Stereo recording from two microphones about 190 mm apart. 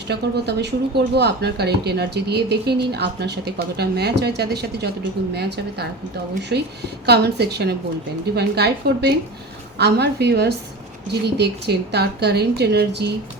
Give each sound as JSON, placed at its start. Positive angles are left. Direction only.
{"t": 0.1, "sound": "speech", "side_deg": -60}